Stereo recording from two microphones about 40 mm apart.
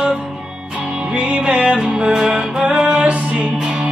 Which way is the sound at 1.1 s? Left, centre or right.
Right.